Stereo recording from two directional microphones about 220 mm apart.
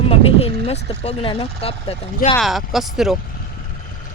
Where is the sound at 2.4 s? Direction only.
Centre (ahead or behind).